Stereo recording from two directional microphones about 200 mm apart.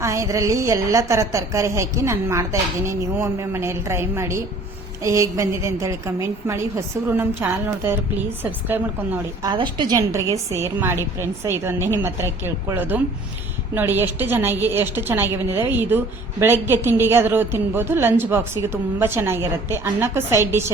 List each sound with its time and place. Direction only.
0.0 s a woman's voice: 15° right (ahead or behind)
9.5 s a woman's voice: 20° right (ahead or behind)